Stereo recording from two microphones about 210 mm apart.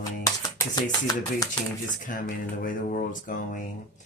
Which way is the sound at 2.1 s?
40° left (ahead or behind).